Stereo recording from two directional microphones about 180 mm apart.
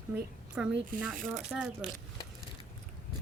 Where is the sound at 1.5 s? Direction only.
5° right (ahead or behind).